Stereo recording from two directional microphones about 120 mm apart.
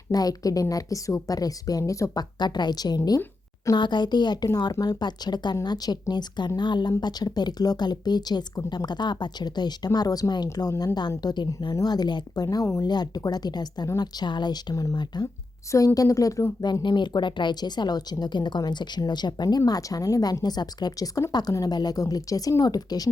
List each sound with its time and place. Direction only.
0.1 s a woman's voice: 30° left (ahead or behind)